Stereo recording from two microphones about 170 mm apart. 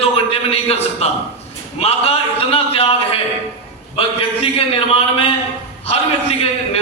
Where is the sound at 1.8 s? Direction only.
35° left (ahead or behind).